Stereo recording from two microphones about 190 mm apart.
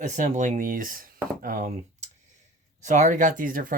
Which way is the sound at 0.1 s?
40° right (ahead or behind).